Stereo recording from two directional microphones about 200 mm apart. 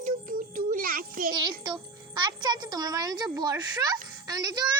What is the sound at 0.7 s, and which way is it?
Child singing, 45° right (ahead or behind).